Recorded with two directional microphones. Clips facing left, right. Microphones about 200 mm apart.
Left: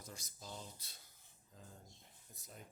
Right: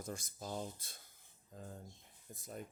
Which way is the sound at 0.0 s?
50° right (ahead or behind).